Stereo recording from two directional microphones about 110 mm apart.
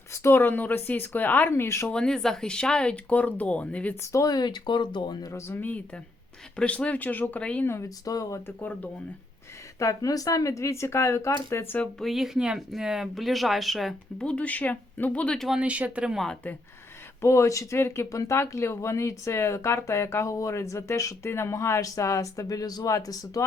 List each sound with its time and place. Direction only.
0.1 s speech: 20° left (ahead or behind)
1.9 s speech: 5° left (ahead or behind)
4.1 s speech: 35° left (ahead or behind)
5.3 s speech: 20° left (ahead or behind)
8.4 s speech: 15° left (ahead or behind)
9.7 s speech: 30° left (ahead or behind)
11.9 s speech: centre (ahead or behind)
15.4 s speech: 10° right (ahead or behind)
16.1 s speech: 5° left (ahead or behind)
17.2 s speech: 25° left (ahead or behind)